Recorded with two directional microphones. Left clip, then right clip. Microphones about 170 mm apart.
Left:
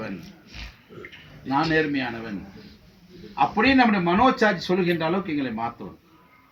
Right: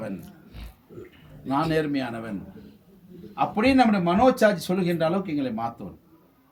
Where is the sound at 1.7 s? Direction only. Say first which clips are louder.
Left 2 dB; 35° right (ahead or behind).